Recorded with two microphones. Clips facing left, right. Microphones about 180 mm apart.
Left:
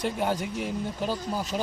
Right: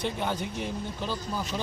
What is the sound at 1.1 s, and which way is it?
Speech, 40° left (ahead or behind).